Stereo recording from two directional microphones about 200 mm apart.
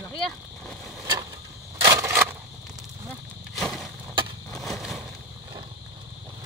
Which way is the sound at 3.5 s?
Centre (ahead or behind).